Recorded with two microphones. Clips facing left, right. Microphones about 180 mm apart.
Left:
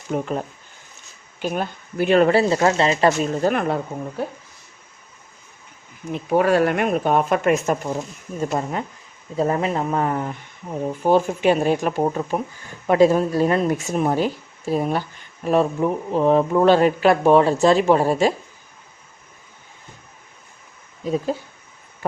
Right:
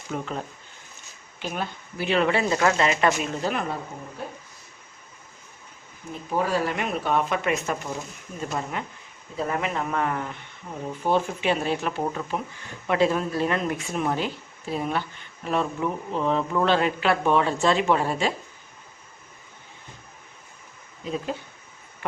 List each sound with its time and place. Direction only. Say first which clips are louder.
0.1 s speech: left 7 dB; 45° left (ahead or behind)
3.5 s speech: left 7 dB; 60° left (ahead or behind)
6.1 s speech: left 8 dB; 70° left (ahead or behind); by 18.3 s 40° left (ahead or behind)
21.0 s speech: left 7 dB; 40° left (ahead or behind)